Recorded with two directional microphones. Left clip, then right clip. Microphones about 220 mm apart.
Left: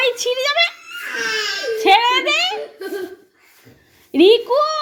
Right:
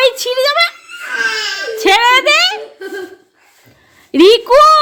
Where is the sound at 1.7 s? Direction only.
30° right (ahead or behind).